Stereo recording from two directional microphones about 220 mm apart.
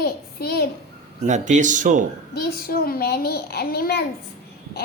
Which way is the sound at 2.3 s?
45° left (ahead or behind).